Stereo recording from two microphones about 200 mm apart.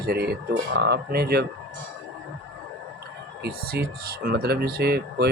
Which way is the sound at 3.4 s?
50° right (ahead or behind).